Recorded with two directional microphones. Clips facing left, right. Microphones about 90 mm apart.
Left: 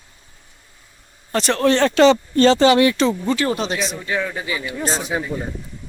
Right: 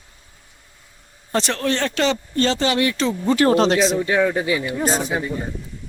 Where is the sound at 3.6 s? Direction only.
90° right.